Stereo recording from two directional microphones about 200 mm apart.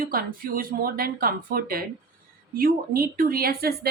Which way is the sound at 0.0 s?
45° right (ahead or behind).